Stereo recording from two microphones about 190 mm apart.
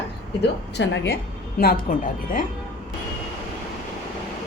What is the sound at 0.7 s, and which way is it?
Speech, 70° left (ahead or behind).